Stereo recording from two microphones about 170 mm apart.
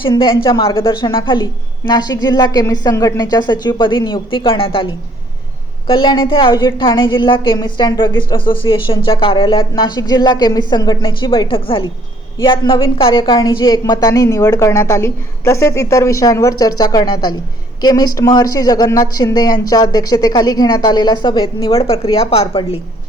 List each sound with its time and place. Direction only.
0.1 s speech: 30° left (ahead or behind)
5.9 s speech: 30° left (ahead or behind)